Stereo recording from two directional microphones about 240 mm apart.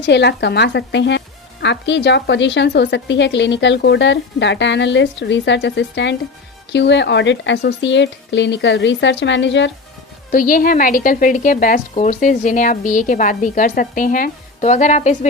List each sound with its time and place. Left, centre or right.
0.0 s a woman's voice: left
10.3 s a woman's voice: left